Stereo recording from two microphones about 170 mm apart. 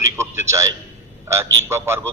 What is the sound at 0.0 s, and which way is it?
A man's voice, 15° right (ahead or behind).